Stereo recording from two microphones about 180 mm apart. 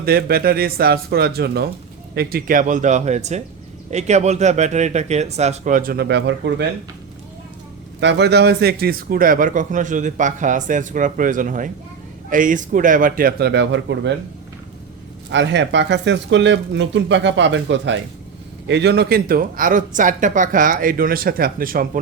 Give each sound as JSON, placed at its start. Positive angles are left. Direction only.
{"t": 0.0, "sound": "a man's voice", "side_deg": -55}
{"t": 8.0, "sound": "a man's voice", "side_deg": -70}
{"t": 15.3, "sound": "speech", "side_deg": -80}
{"t": 18.7, "sound": "a man's voice", "side_deg": -70}